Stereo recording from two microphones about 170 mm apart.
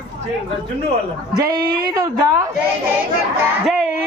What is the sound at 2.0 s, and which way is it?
Speech, 20° right (ahead or behind).